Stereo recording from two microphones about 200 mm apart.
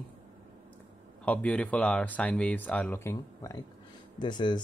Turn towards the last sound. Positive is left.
turn(degrees=20)  # may be behind; listen again after turning